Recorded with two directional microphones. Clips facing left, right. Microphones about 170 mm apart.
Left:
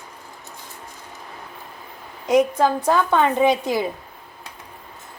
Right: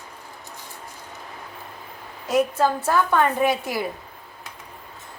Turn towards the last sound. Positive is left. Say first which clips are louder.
# left 4 dB
turn(degrees=20)  # may be behind; listen again after turning